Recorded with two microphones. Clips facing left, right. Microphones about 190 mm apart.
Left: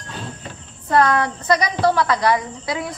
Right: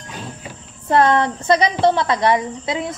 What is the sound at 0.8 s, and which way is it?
A woman's voice, 25° right (ahead or behind).